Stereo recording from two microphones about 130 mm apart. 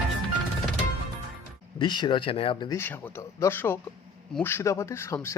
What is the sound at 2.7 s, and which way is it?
A man's voice, 15° left (ahead or behind).